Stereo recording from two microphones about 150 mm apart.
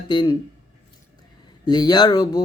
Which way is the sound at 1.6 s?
30° left (ahead or behind).